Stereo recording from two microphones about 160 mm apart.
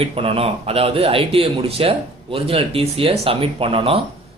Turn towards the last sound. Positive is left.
turn(degrees=-35)  # may be behind; listen again after turning